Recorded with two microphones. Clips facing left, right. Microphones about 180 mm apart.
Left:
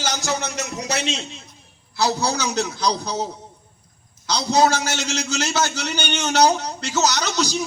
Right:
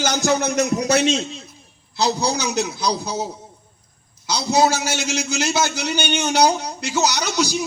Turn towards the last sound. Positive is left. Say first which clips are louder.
# right 1 dB
turn(degrees=-10)  # may be behind; listen again after turning